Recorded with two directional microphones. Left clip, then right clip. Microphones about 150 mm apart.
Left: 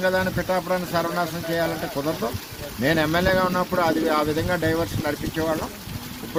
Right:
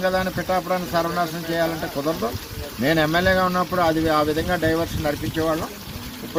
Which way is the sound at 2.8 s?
30° left (ahead or behind).